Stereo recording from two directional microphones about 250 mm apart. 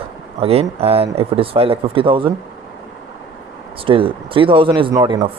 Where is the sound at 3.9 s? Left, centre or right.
Right.